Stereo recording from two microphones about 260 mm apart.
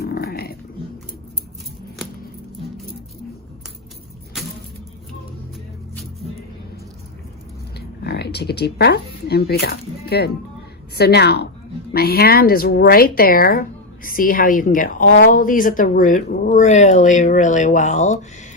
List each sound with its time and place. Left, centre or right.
0.0 s dog: left
7.8 s speech: left